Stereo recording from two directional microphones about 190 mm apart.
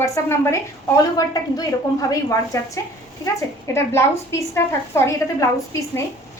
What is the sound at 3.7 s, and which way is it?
A woman's voice, 15° left (ahead or behind).